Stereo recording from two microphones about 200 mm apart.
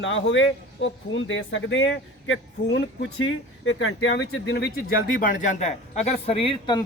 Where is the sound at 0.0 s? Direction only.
70° left (ahead or behind).